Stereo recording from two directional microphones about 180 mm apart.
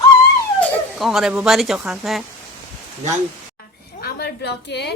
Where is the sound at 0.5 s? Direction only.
Centre (ahead or behind).